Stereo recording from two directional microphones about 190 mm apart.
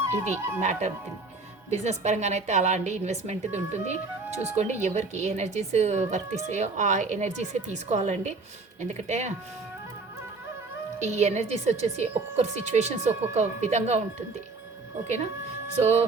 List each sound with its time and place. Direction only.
0.0 s speech: 15° right (ahead or behind)
0.6 s speech: 40° right (ahead or behind)
11.0 s speech: 35° right (ahead or behind)